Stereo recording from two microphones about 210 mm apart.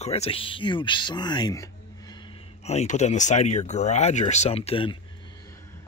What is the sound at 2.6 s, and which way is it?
Speech, 35° left (ahead or behind).